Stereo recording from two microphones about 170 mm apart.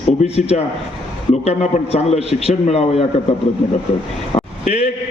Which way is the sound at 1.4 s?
40° left (ahead or behind).